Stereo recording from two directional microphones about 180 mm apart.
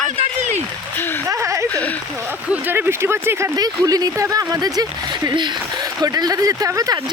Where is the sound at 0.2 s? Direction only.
40° right (ahead or behind).